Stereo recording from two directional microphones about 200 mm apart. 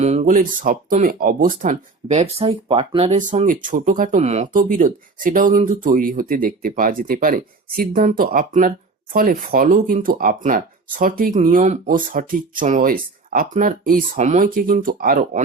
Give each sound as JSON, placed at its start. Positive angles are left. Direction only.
{"t": 0.0, "sound": "speech", "side_deg": -35}